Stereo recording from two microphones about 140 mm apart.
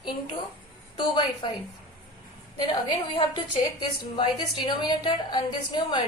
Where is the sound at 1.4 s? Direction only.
35° left (ahead or behind).